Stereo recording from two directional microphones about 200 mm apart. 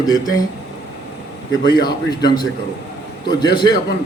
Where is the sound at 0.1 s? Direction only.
20° left (ahead or behind).